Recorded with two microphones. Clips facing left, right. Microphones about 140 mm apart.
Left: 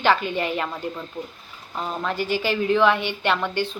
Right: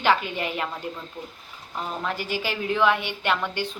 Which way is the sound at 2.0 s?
10° right (ahead or behind).